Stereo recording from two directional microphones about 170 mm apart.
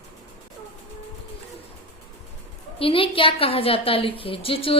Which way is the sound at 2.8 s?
30° left (ahead or behind).